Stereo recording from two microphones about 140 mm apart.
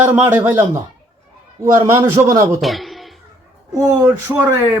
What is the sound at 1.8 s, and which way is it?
Speech, 20° right (ahead or behind).